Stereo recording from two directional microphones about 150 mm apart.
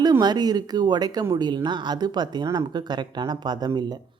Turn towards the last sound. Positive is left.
turn(degrees=-30)  # may be behind; listen again after turning